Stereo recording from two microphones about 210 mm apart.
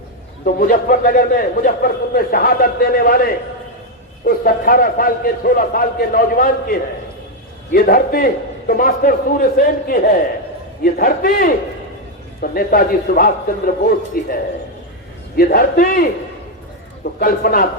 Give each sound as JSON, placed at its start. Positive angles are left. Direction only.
{"t": 0.4, "sound": "a man's voice", "side_deg": 40}
{"t": 15.4, "sound": "a man's voice", "side_deg": 45}
{"t": 17.0, "sound": "a man's voice", "side_deg": 45}